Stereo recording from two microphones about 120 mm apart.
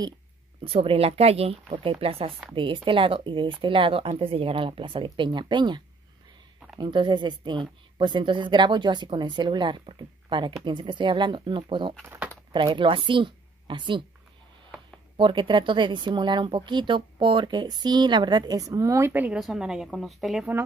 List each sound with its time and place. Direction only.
0.7 s speech: 50° right (ahead or behind)
6.8 s a woman's voice: 40° right (ahead or behind)
15.1 s speech: 45° right (ahead or behind); by 20.4 s centre (ahead or behind)